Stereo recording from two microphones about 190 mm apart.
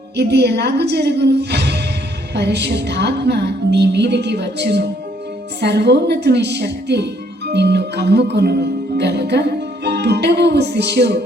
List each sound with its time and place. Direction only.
0.2 s speech: 60° right (ahead or behind)